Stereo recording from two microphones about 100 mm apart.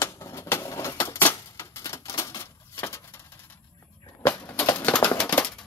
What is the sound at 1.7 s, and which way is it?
Typewriter, 30° left (ahead or behind).